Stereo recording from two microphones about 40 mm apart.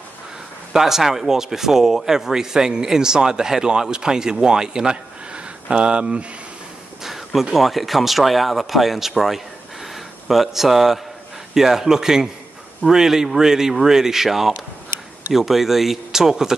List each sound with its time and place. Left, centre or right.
0.7 s speech: centre; by 6.2 s right
7.0 s a sound: centre
7.5 s speech: centre